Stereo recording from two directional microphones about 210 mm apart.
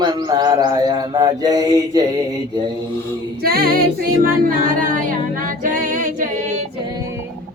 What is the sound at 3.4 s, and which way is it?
Music, 45° right (ahead or behind).